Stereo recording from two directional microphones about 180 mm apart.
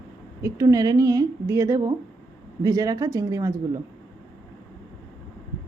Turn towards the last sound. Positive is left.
turn(degrees=-15)  # may be behind; listen again after turning